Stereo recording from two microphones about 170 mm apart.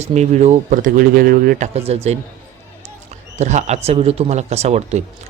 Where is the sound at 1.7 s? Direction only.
40° right (ahead or behind).